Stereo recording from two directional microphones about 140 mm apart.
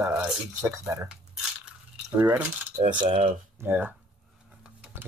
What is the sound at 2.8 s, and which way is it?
Speech, 35° right (ahead or behind).